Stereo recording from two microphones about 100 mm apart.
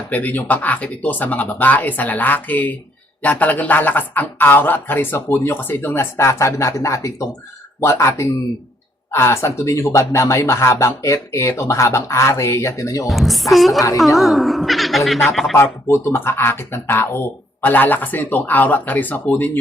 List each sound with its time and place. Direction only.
0.1 s speech: 20° left (ahead or behind)
13.1 s speech: centre (ahead or behind)
13.7 s a woman's voice: 35° left (ahead or behind)
14.2 s speech: centre (ahead or behind)
15.5 s speech: 25° left (ahead or behind)